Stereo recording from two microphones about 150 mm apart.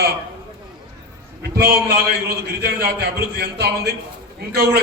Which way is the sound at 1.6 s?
90° right.